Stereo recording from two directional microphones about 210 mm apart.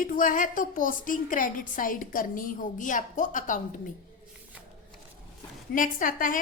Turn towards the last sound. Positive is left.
turn(degrees=40)  # may be behind; listen again after turning